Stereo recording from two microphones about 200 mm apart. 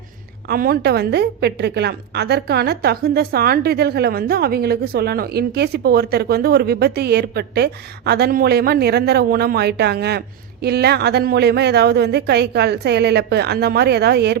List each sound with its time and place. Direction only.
0.4 s a woman's voice: 50° right (ahead or behind)